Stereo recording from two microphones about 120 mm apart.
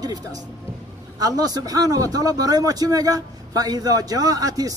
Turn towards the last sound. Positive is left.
turn(degrees=-30)  # may be behind; listen again after turning